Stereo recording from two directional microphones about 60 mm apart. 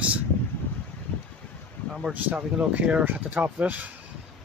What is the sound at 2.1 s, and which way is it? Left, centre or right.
Speech, right.